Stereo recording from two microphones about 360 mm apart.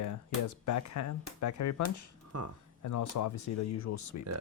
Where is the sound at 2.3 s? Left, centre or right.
Right.